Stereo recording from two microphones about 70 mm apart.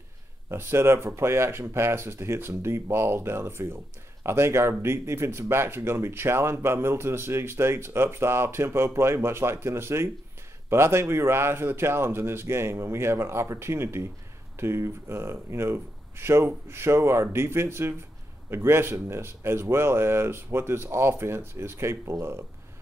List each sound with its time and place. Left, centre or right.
0.5 s speech: right